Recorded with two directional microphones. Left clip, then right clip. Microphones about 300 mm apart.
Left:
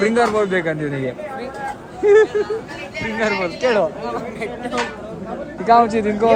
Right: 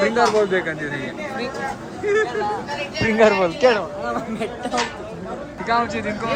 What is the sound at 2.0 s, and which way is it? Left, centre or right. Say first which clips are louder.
Speech: left 8 dB; centre.